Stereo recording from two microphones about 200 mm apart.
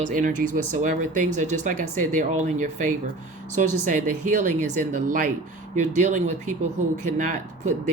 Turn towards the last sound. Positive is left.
turn(degrees=-40)  # may be behind; listen again after turning